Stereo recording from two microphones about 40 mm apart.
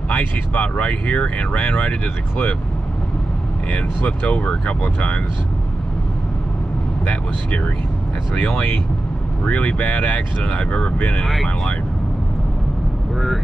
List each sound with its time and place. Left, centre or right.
0.1 s speech: left
3.7 s speech: left
7.1 s speech: left
8.4 s speech: left
9.4 s speech: left